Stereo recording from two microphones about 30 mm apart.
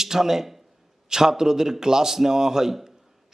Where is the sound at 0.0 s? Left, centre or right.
Centre.